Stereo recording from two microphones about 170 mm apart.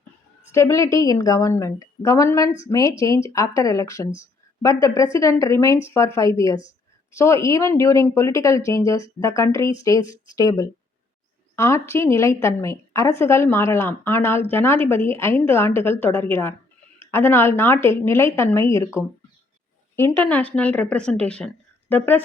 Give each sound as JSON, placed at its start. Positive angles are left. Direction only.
{"t": 0.5, "sound": "a woman's voice", "side_deg": 15}
{"t": 20.0, "sound": "a woman's voice", "side_deg": 10}